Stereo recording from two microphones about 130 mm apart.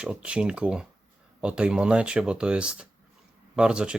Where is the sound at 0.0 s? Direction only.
10° right (ahead or behind).